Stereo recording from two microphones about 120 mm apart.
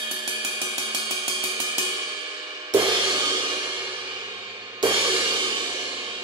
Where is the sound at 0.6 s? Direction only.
30° right (ahead or behind).